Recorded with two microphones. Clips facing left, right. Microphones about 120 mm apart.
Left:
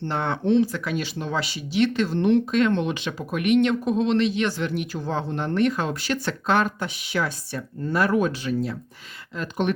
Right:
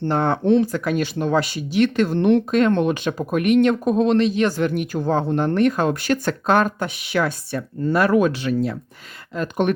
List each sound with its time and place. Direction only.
0.0 s speech: 45° right (ahead or behind); by 8.7 s 70° right (ahead or behind)
9.3 s speech: 50° right (ahead or behind)